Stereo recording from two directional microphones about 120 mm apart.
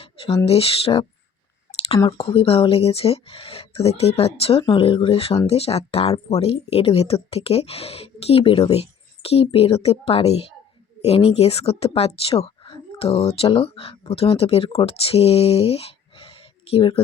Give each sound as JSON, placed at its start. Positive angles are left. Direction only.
{"t": 0.4, "sound": "speech", "side_deg": 55}
{"t": 2.1, "sound": "speech", "side_deg": 50}
{"t": 4.6, "sound": "speech", "side_deg": 45}